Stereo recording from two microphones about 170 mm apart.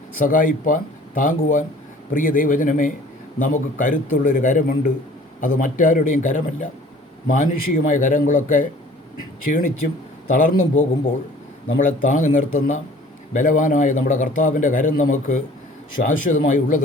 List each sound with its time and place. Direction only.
0.2 s a man's voice: 55° left (ahead or behind)
10.2 s a man's voice: 50° left (ahead or behind)